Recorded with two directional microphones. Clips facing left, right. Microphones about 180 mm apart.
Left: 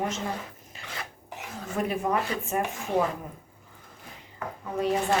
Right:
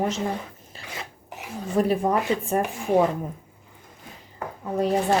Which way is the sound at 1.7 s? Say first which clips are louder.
Right 6 dB; 35° right (ahead or behind).